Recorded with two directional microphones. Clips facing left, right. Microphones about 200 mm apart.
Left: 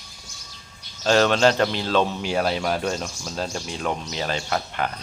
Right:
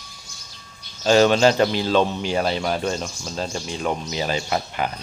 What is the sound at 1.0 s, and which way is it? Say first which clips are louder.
Speech: right 3 dB; 5° right (ahead or behind).